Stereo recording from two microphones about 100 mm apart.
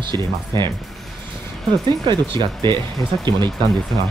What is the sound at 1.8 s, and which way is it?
Speech, 45° right (ahead or behind).